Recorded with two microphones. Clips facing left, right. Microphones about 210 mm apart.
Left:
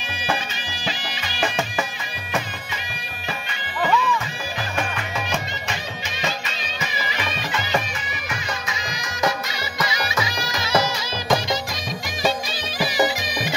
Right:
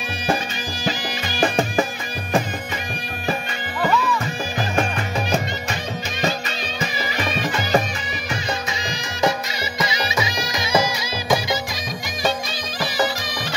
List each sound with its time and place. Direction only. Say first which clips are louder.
0.8 s music: right 5 dB; 45° right (ahead or behind)
4.7 s music: right 5 dB; 40° right (ahead or behind)
7.2 s music: right 5 dB; 40° right (ahead or behind)
8.9 s music: right 3 dB; 25° right (ahead or behind); by 11.6 s 5° right (ahead or behind)
12.7 s music: left 2 dB; 10° left (ahead or behind)